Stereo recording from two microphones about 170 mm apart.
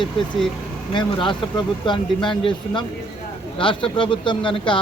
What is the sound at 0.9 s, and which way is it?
A man's voice, 25° left (ahead or behind).